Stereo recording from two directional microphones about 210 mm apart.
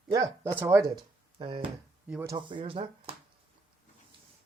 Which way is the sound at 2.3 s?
25° right (ahead or behind).